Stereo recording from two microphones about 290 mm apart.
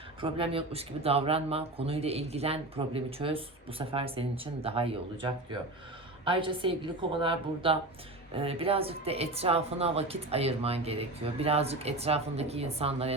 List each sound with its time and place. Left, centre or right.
0.2 s a woman's voice: centre